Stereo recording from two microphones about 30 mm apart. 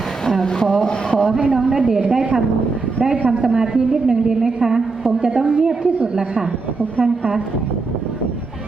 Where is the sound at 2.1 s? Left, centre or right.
Right.